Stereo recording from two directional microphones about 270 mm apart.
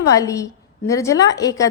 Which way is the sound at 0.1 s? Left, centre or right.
Centre.